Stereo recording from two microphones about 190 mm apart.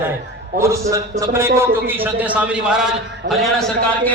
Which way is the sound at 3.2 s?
55° right (ahead or behind).